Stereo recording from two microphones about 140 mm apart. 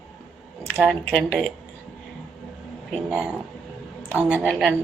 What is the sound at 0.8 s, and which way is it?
Speech, centre (ahead or behind).